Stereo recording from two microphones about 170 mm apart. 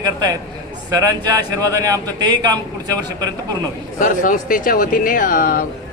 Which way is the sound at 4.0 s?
50° left (ahead or behind).